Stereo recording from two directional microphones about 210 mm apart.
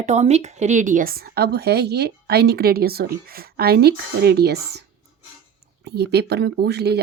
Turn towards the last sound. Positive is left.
turn(degrees=-50)  # may be behind; listen again after turning